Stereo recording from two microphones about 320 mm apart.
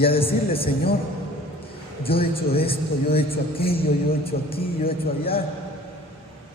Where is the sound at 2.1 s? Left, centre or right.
Centre.